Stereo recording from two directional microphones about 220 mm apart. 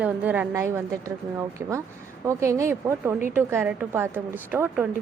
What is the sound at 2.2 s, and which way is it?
A woman's voice, 15° right (ahead or behind).